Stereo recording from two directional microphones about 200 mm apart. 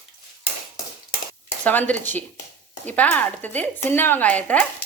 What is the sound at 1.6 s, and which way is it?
Speech, 10° left (ahead or behind).